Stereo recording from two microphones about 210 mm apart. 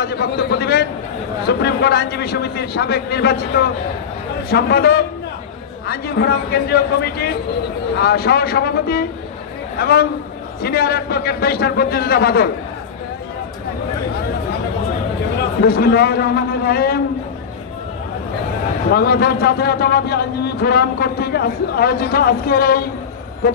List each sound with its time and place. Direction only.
0.0 s a man's voice: 50° left (ahead or behind)
15.6 s a man's voice: 50° left (ahead or behind)
18.9 s a man's voice: 50° left (ahead or behind)